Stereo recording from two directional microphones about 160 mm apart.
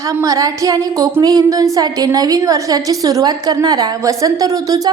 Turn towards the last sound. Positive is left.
turn(degrees=-25)  # may be behind; listen again after turning